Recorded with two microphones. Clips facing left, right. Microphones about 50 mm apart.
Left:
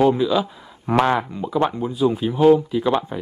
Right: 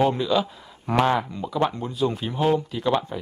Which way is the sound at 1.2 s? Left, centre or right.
Centre.